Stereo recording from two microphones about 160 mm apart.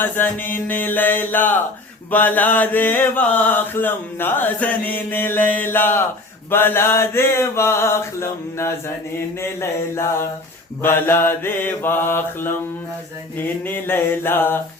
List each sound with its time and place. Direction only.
0.0 s mantra: 10° left (ahead or behind)
13.7 s mantra: 15° left (ahead or behind)